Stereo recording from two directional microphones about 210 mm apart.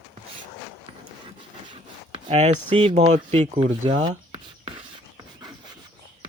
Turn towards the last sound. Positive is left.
turn(degrees=-25)  # may be behind; listen again after turning